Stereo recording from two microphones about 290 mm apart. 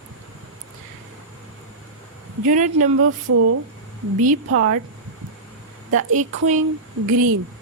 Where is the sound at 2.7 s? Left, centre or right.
Right.